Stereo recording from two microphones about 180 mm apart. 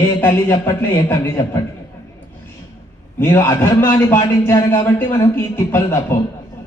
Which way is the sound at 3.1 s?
15° left (ahead or behind).